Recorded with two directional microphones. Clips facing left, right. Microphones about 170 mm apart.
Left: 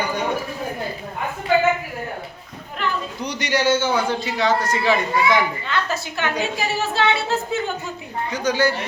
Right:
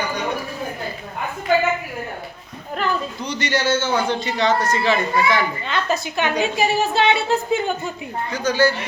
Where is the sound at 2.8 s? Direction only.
40° right (ahead or behind).